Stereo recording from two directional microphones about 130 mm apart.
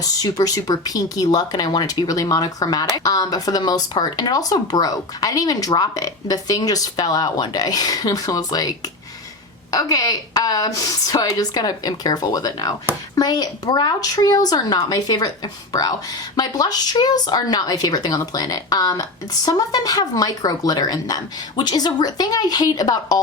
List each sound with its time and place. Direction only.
0.0 s speech: 30° left (ahead or behind)
9.7 s speech: 30° left (ahead or behind)
16.3 s speech: 30° left (ahead or behind)